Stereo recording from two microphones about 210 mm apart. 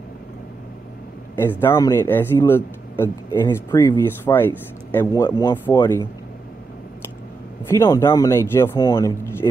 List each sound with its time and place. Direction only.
1.3 s speech: 10° left (ahead or behind)
7.7 s speech: 15° left (ahead or behind)